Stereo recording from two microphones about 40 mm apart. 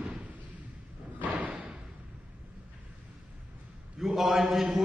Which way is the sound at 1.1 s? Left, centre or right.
Right.